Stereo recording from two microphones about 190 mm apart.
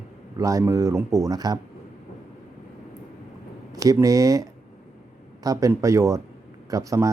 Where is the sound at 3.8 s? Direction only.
20° right (ahead or behind).